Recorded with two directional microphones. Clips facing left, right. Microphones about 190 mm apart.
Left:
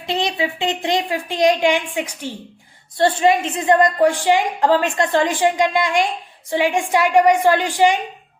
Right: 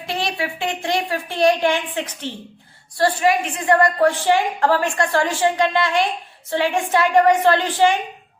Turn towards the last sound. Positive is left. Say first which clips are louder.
# left 1 dB
turn(degrees=15)  # may be behind; listen again after turning